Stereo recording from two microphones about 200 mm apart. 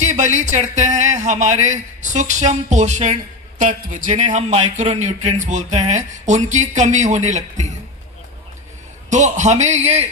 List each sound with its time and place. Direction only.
0.0 s speech: 35° right (ahead or behind)
9.0 s speech: 35° right (ahead or behind)